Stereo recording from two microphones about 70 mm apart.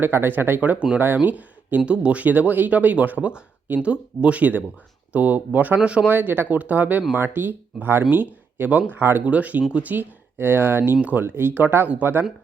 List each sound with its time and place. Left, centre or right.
0.0 s speech: right; by 6.1 s centre
6.1 s speech: right
9.2 s speech: centre